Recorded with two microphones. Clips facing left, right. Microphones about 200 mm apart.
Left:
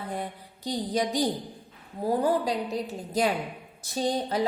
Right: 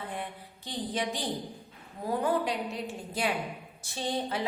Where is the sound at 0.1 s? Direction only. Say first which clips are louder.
Left 4 dB; 40° left (ahead or behind).